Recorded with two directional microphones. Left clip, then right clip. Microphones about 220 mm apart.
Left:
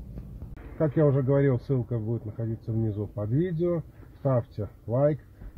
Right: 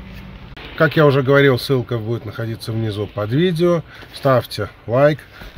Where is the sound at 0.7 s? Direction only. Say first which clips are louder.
Right 11 dB; 25° right (ahead or behind).